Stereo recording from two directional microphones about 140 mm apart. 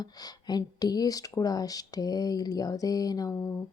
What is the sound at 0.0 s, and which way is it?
Speech, 30° left (ahead or behind).